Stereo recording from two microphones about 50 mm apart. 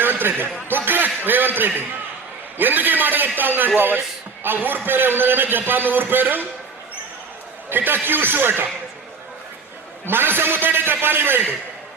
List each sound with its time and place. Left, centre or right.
0.0 s a sound: right
0.9 s a man's voice: right
7.7 s a man's voice: right
10.1 s a man's voice: right